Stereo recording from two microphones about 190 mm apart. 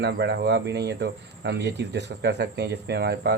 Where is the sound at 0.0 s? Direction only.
60° right (ahead or behind).